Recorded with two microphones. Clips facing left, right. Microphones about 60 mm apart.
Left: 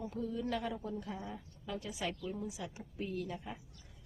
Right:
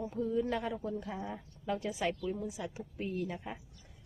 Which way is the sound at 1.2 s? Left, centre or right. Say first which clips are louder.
Right 6 dB; right.